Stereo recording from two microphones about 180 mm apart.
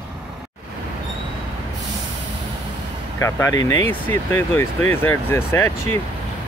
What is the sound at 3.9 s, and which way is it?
Speech, 10° left (ahead or behind).